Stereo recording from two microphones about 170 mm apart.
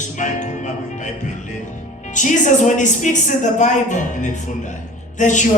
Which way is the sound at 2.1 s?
45° left (ahead or behind).